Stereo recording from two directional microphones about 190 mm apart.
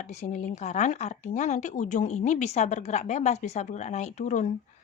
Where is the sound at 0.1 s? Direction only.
35° left (ahead or behind).